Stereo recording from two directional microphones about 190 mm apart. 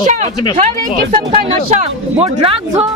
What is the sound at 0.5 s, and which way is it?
A woman's voice, 40° right (ahead or behind).